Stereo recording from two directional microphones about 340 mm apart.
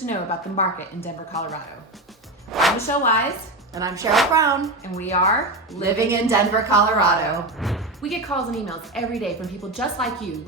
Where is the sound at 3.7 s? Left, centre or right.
Centre.